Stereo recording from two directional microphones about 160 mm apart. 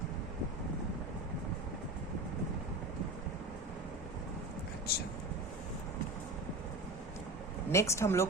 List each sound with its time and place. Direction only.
4.9 s speech: 75° left (ahead or behind)
7.7 s speech: 15° left (ahead or behind)